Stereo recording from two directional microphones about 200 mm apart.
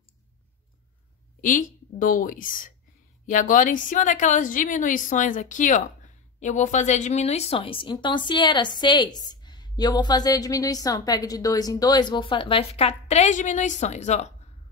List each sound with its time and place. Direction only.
1.4 s a woman's voice: 40° left (ahead or behind)